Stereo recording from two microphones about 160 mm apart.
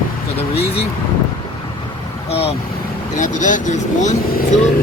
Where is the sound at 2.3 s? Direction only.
40° left (ahead or behind).